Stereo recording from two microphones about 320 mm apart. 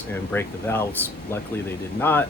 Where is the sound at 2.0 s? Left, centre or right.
Centre.